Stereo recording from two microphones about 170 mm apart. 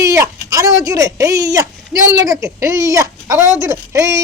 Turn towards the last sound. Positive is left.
turn(degrees=-20)  # may be behind; listen again after turning